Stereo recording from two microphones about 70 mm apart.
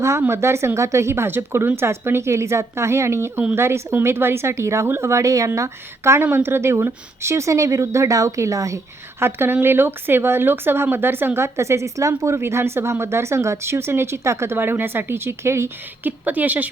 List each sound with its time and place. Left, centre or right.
0.3 s a woman's voice: right
9.2 s speech: right
16.0 s a woman's voice: right